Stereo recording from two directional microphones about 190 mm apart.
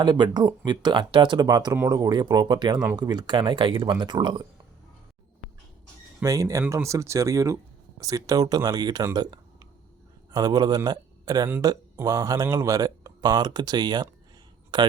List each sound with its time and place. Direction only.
0.0 s speech: 20° right (ahead or behind)
6.2 s speech: 15° right (ahead or behind)